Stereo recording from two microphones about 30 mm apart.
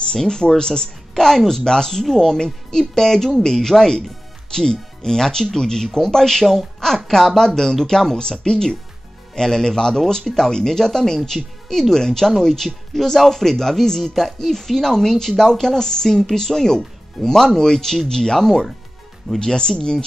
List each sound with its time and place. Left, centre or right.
0.1 s speech: left
1.1 s a woman's voice: centre
14.1 s speech: centre
17.2 s speech: centre
17.6 s speech: centre